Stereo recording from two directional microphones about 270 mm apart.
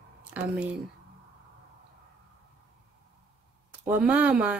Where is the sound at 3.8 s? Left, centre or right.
Centre.